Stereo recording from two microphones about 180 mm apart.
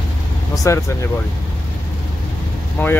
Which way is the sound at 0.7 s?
15° left (ahead or behind).